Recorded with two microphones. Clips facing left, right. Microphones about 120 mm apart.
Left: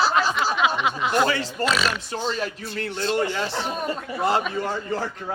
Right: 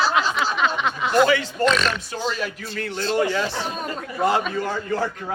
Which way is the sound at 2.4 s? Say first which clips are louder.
Even; 25° left (ahead or behind).